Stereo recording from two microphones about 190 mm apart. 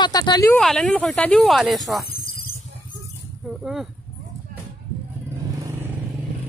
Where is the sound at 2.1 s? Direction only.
50° left (ahead or behind).